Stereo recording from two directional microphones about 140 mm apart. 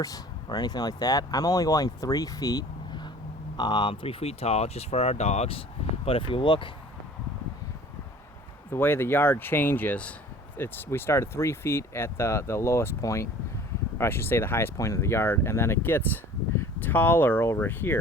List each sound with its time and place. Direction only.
0.0 s speech: 25° left (ahead or behind)
8.7 s speech: 15° left (ahead or behind)